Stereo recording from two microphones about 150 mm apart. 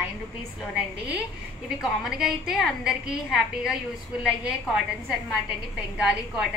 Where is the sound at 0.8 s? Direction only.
10° right (ahead or behind).